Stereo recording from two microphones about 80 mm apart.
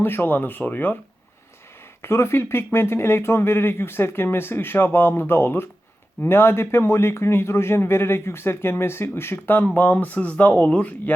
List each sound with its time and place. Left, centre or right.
0.0 s speech: left
2.0 s a man's voice: left; by 11.1 s centre